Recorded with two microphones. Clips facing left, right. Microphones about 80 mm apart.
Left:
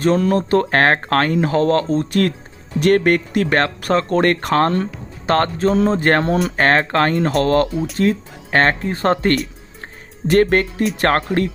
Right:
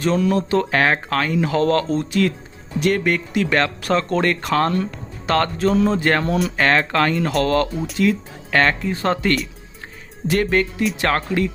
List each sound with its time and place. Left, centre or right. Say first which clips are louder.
0.0 s speech: left 3 dB; left